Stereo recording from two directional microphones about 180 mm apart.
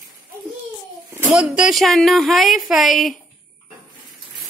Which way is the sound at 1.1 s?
5° right (ahead or behind).